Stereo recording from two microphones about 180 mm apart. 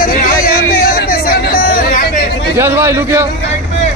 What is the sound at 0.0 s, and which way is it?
Chatter, 55° left (ahead or behind).